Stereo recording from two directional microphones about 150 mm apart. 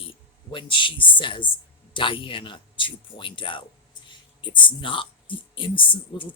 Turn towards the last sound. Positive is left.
turn(degrees=35)  # may be behind; listen again after turning